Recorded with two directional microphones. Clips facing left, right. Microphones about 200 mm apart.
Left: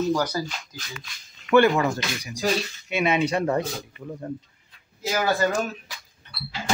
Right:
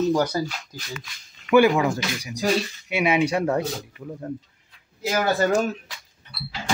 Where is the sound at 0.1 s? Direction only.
25° right (ahead or behind).